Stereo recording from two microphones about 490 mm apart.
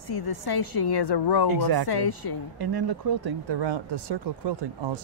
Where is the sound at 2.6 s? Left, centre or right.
Right.